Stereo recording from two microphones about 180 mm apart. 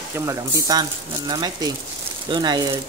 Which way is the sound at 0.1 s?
20° right (ahead or behind).